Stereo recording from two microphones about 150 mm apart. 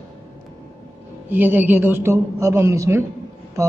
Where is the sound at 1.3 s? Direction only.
15° right (ahead or behind).